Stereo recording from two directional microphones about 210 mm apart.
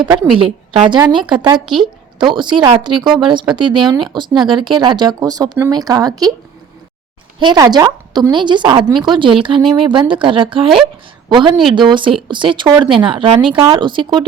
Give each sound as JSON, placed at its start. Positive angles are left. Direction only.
{"t": 0.3, "sound": "speech", "side_deg": -25}
{"t": 7.3, "sound": "speech", "side_deg": -20}